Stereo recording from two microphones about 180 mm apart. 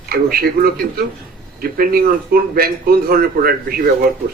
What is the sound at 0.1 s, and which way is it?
A man's voice, 55° right (ahead or behind).